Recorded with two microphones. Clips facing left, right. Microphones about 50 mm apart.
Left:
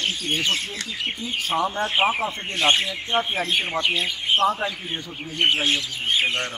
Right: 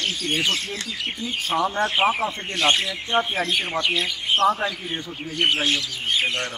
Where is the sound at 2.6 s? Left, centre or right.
Left.